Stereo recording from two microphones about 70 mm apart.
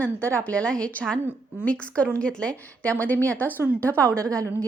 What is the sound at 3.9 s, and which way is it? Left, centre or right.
Speech, right.